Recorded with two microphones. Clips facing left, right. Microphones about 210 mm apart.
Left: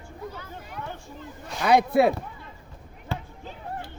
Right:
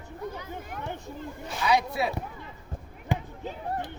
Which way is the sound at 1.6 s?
55° left (ahead or behind).